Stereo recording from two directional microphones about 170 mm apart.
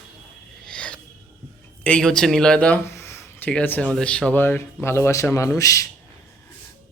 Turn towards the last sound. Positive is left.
turn(degrees=20)  # may be behind; listen again after turning